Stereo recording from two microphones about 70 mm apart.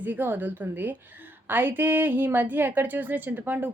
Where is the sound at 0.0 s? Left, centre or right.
Right.